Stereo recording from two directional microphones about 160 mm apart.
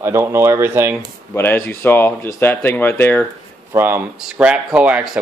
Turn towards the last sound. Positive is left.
turn(degrees=-5)  # may be behind; listen again after turning